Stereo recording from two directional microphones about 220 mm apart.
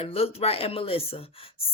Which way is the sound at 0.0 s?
25° left (ahead or behind).